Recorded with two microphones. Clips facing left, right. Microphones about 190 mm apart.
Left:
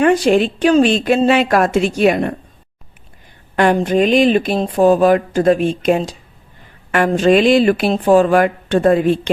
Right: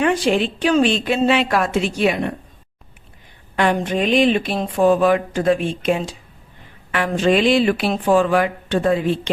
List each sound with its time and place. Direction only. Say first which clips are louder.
0.0 s speech: left 5 dB; 45° left (ahead or behind)
3.5 s a woman's voice: left 5 dB; 50° left (ahead or behind)